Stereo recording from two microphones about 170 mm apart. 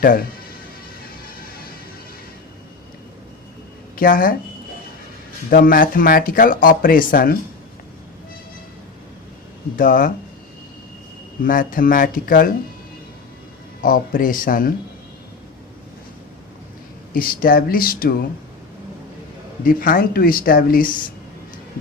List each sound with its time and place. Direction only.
0.0 s speech: 60° left (ahead or behind)
3.9 s speech: 55° left (ahead or behind)
5.5 s speech: 55° left (ahead or behind)
9.7 s speech: 55° left (ahead or behind)
11.4 s speech: 55° left (ahead or behind)
13.8 s speech: 55° left (ahead or behind)
17.2 s speech: 55° left (ahead or behind)
19.6 s speech: 55° left (ahead or behind)